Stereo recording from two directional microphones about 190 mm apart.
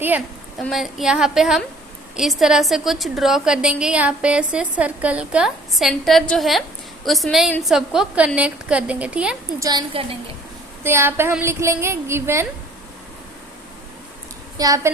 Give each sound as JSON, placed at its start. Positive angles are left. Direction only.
{"t": 0.6, "sound": "a woman's voice", "side_deg": 0}
{"t": 9.6, "sound": "a woman's voice", "side_deg": -25}
{"t": 10.8, "sound": "a woman's voice", "side_deg": -10}
{"t": 14.6, "sound": "a woman's voice", "side_deg": -20}